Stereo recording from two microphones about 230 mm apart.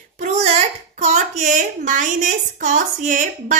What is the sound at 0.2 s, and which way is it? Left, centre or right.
A child's voice, right.